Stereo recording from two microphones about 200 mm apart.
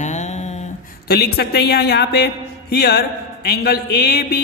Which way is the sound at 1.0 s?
50° left (ahead or behind).